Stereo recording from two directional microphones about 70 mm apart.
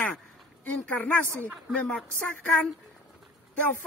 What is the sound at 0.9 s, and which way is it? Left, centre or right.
Speech, left.